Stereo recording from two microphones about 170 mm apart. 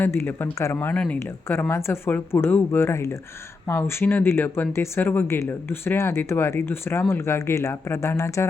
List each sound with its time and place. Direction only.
0.0 s speech: 10° left (ahead or behind)